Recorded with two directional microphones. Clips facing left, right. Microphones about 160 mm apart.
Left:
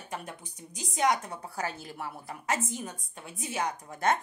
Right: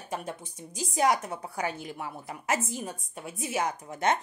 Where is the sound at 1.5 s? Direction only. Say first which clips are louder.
Right 2 dB; 20° right (ahead or behind).